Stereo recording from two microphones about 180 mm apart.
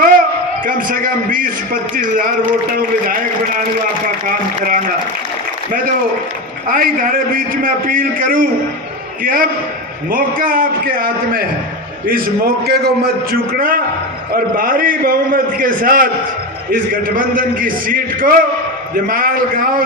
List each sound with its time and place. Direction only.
0.6 s a man's voice: 50° right (ahead or behind)
4.3 s a man's voice: 50° right (ahead or behind)
6.7 s a man's voice: 55° right (ahead or behind)